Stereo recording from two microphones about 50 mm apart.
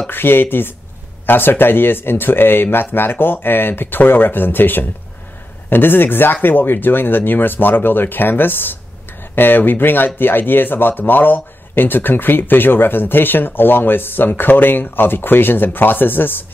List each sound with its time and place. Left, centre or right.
0.0 s speech: left